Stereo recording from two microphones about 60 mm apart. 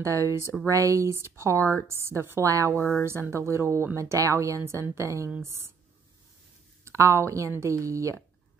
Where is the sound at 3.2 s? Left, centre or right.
Right.